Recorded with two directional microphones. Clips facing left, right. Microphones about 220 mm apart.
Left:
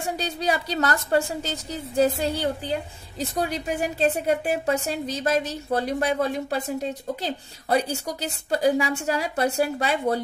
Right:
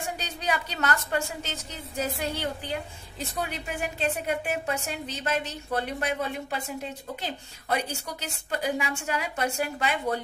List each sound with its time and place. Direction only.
0.2 s a woman's voice: 35° left (ahead or behind)